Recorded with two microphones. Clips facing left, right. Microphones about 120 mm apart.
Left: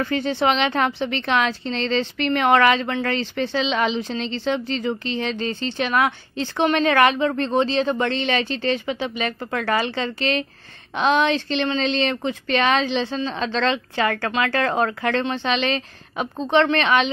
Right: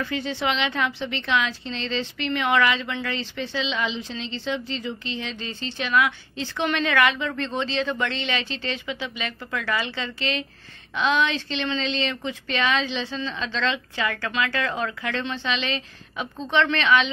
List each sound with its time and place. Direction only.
0.0 s a woman's voice: 50° left (ahead or behind)